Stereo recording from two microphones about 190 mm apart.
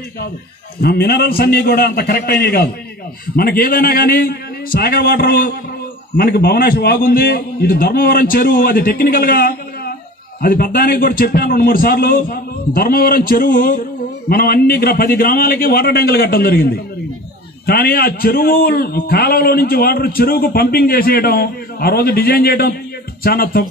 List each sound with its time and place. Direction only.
0.7 s a man's voice: 55° left (ahead or behind)